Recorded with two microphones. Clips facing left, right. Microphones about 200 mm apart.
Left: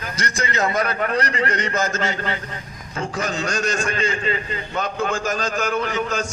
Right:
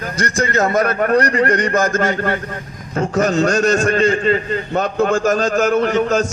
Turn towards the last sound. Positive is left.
turn(degrees=-40)  # may be behind; listen again after turning